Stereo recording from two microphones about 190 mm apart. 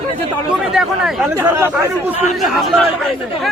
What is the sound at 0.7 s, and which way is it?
Speech, centre (ahead or behind).